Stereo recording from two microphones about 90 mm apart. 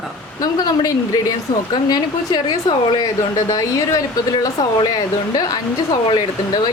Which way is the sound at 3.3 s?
35° left (ahead or behind).